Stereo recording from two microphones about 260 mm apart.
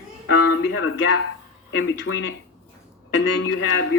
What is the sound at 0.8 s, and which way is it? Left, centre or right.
Speech, left.